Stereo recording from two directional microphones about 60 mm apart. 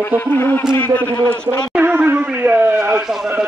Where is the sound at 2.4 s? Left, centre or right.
Right.